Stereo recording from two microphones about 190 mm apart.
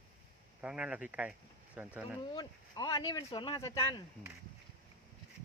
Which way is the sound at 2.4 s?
20° left (ahead or behind).